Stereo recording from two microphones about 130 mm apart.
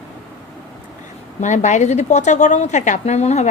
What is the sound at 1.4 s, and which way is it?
Speech, 65° left (ahead or behind).